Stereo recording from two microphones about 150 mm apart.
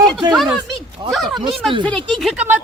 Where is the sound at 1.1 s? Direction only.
Centre (ahead or behind).